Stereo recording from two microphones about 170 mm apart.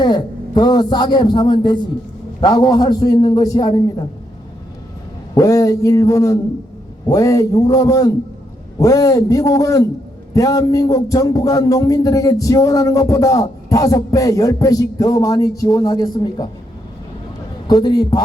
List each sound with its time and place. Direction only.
0.0 s a man's voice: 25° left (ahead or behind)
5.3 s a man's voice: 20° left (ahead or behind)
17.7 s speech: 25° left (ahead or behind)